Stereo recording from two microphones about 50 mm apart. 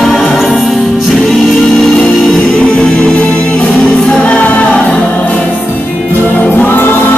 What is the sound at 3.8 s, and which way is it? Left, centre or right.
Music, centre.